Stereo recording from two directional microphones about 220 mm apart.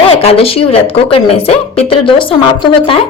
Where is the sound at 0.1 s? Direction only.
25° left (ahead or behind).